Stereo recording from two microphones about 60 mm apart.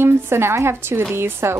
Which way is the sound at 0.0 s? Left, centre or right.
Right.